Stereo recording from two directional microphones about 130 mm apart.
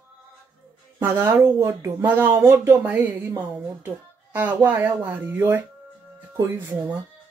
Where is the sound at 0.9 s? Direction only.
20° right (ahead or behind).